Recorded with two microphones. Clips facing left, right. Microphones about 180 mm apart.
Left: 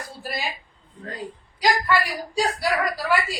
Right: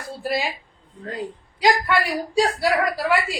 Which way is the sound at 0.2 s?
25° right (ahead or behind).